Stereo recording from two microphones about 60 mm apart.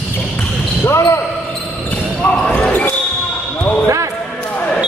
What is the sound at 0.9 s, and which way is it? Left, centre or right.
Basketball bounce, left.